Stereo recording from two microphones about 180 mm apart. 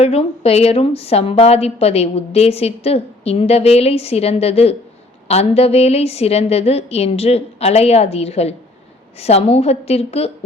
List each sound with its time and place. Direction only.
0.0 s a woman's voice: 35° left (ahead or behind)